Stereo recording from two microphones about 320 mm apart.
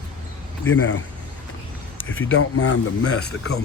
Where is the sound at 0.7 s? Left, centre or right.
Left.